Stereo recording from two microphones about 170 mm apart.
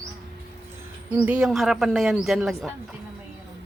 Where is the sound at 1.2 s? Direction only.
5° right (ahead or behind).